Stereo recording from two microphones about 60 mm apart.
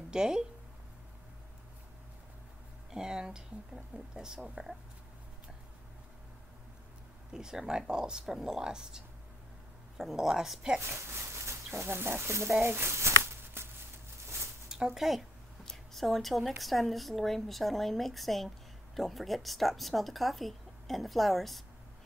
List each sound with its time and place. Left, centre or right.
0.1 s speech: centre
2.9 s speech: centre
7.3 s speech: centre
10.8 s speech: right
12.5 s a sound: right
15.0 s a woman's voice: centre